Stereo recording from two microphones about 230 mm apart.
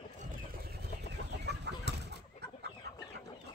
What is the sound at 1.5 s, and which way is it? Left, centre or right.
Chicken, right.